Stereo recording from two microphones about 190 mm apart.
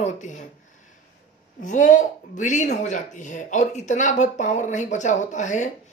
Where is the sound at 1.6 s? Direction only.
40° left (ahead or behind).